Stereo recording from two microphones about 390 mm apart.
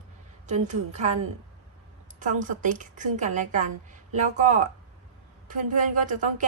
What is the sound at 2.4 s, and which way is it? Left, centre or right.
A woman's voice, centre.